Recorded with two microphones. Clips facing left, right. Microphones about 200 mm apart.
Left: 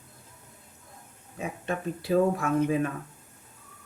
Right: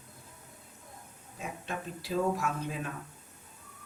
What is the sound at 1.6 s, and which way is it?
Speech, 55° left (ahead or behind).